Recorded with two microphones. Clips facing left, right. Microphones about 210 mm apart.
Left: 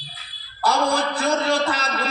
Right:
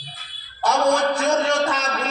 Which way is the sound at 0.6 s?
35° left (ahead or behind).